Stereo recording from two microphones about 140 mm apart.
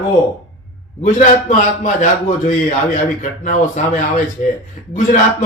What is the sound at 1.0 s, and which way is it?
Speech, 60° left (ahead or behind).